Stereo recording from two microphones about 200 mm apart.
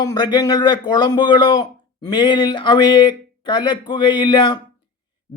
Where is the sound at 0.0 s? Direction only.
20° left (ahead or behind).